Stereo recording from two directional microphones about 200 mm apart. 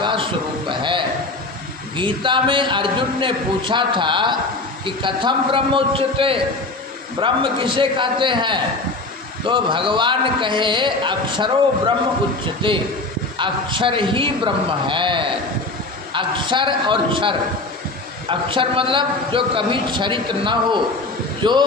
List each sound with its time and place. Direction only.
0.0 s a sound: 25° right (ahead or behind)
2.0 s a man's voice: 25° right (ahead or behind)
12.6 s a man's voice: 25° right (ahead or behind)